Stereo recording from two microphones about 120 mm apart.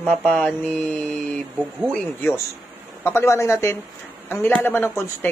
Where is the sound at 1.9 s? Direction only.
15° left (ahead or behind).